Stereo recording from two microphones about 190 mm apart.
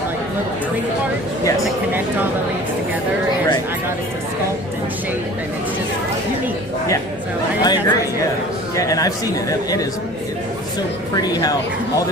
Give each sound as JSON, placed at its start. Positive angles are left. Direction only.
{"t": 7.6, "sound": "a man's voice", "side_deg": 20}